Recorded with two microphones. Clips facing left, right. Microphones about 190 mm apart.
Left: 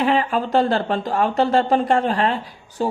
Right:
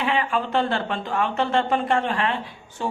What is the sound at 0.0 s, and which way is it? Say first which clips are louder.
Speech: left 4 dB; 40° left (ahead or behind).